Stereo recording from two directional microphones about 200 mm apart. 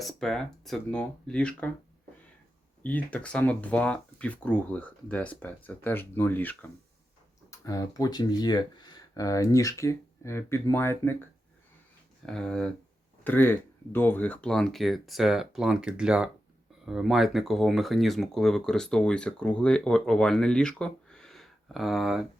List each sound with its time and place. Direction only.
0.0 s speech: centre (ahead or behind)
2.8 s speech: 5° left (ahead or behind)